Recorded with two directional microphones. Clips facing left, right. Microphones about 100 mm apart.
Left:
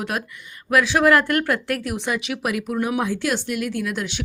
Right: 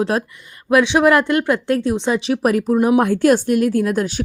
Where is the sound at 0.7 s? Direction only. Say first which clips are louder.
Right 4 dB; 20° right (ahead or behind); by 2.7 s 40° right (ahead or behind).